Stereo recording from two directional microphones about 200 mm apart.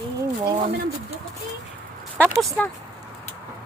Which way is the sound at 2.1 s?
5° left (ahead or behind).